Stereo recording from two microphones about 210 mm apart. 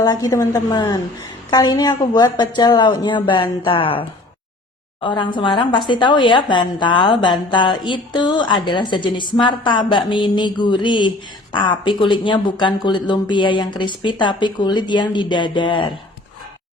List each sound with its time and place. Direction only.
0.0 s a woman's voice: 20° left (ahead or behind)